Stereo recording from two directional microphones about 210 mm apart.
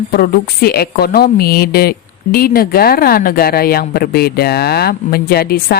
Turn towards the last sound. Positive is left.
turn(degrees=45)  # may be behind; listen again after turning